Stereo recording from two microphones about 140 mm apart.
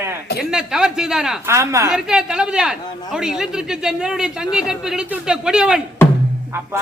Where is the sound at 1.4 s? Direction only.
20° right (ahead or behind).